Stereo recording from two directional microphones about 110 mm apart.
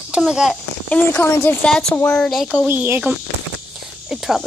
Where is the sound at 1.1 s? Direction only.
25° left (ahead or behind).